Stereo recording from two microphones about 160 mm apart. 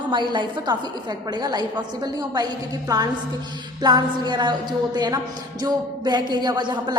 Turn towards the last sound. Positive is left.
turn(degrees=-25)  # may be behind; listen again after turning